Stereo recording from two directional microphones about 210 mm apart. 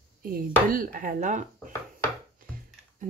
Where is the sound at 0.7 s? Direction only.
40° right (ahead or behind).